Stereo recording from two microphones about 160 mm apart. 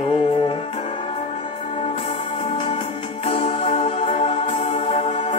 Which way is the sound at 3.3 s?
40° left (ahead or behind).